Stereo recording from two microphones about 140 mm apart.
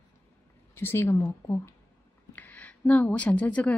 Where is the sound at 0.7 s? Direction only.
15° left (ahead or behind).